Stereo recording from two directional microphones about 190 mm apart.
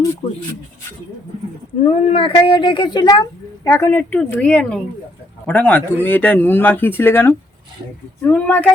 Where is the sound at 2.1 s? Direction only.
30° left (ahead or behind).